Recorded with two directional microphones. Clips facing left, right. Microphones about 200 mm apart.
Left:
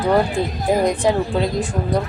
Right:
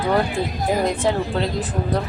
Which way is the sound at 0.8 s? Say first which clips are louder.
Left 3 dB; 15° left (ahead or behind).